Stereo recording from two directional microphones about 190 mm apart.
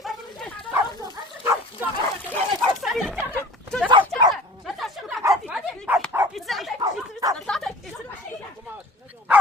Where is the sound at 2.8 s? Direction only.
Centre (ahead or behind).